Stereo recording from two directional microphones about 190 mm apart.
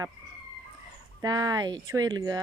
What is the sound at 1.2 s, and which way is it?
Speech, 20° right (ahead or behind).